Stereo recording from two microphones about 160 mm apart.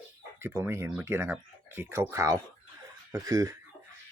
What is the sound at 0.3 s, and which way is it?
Speech, 15° right (ahead or behind).